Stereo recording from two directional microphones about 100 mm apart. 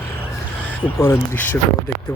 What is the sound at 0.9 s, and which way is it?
Speech, 25° left (ahead or behind).